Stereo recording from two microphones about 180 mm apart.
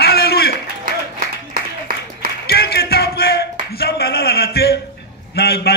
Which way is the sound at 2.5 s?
65° left (ahead or behind).